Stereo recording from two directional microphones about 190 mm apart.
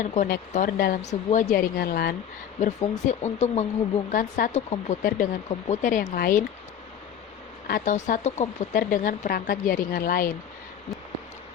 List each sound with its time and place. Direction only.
0.0 s speech: 40° left (ahead or behind)
2.6 s speech: 35° left (ahead or behind)
7.7 s speech: 40° left (ahead or behind)
8.7 s speech: 50° left (ahead or behind)